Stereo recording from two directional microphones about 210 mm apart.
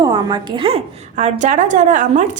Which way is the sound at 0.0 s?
20° right (ahead or behind).